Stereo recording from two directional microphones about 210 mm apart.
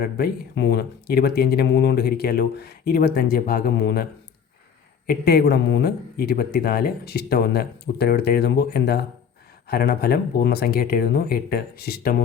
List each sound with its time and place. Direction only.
0.0 s speech: 50° left (ahead or behind)
5.0 s speech: 50° left (ahead or behind)